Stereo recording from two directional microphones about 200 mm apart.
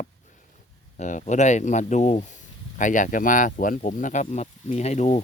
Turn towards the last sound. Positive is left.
turn(degrees=35)  # may be behind; listen again after turning